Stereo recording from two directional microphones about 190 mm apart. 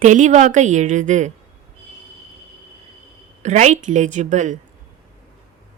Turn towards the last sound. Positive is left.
turn(degrees=-40)  # may be behind; listen again after turning